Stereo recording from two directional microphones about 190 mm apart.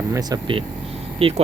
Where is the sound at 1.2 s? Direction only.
30° right (ahead or behind).